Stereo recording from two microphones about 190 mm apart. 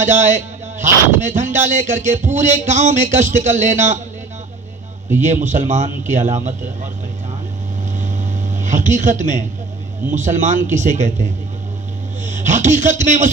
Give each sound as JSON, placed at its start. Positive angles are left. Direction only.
{"t": 0.0, "sound": "speech", "side_deg": -40}
{"t": 5.2, "sound": "speech", "side_deg": -40}
{"t": 7.9, "sound": "a sound", "side_deg": -40}
{"t": 10.1, "sound": "speech", "side_deg": -40}
{"t": 12.2, "sound": "speech", "side_deg": -40}